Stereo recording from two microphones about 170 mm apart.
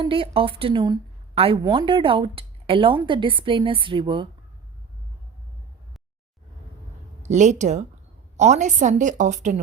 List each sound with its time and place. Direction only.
0.0 s a woman's voice: 30° right (ahead or behind)
7.2 s a woman's voice: 45° right (ahead or behind)